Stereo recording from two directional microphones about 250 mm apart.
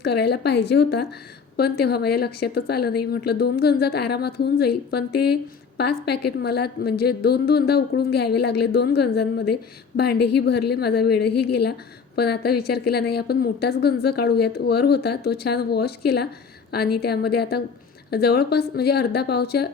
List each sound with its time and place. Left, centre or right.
0.0 s a woman's voice: left